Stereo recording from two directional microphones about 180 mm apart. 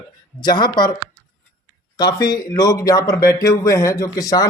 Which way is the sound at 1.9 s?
20° left (ahead or behind).